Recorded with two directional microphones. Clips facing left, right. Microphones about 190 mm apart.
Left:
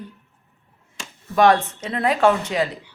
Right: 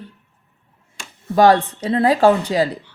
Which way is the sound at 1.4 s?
35° right (ahead or behind).